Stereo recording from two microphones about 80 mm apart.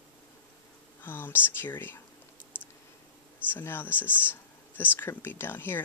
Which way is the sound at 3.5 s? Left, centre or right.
Left.